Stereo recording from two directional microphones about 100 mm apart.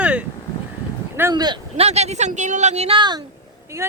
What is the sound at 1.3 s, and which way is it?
Speech, 45° right (ahead or behind).